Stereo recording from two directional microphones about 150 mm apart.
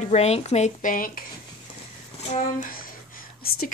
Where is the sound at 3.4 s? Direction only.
90° left.